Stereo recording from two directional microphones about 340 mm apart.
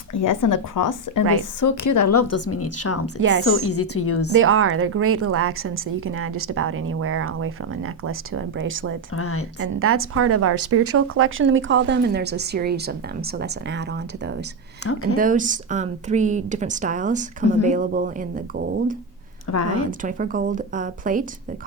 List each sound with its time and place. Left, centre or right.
0.1 s a woman's voice: left
4.4 s a woman's voice: right
9.1 s a woman's voice: left
9.8 s a woman's voice: right
19.5 s speech: left
20.0 s speech: right